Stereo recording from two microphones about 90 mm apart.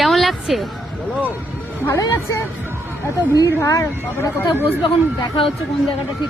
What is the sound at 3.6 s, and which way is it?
Speech, 30° left (ahead or behind).